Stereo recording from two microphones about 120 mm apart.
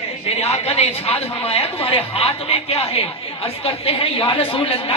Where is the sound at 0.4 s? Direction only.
60° left (ahead or behind).